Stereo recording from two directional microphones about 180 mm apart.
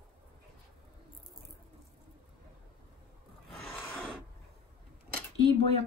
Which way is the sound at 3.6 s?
5° left (ahead or behind).